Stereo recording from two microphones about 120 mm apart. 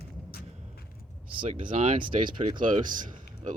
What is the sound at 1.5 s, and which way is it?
Speech, 85° right.